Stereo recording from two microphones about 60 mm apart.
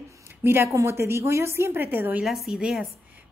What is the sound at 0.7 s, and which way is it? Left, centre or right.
A woman's voice, right.